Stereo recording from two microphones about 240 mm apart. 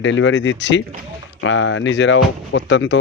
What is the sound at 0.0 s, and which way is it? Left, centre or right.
Speech, left.